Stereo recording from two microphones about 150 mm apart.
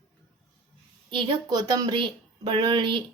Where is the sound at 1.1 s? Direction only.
35° right (ahead or behind).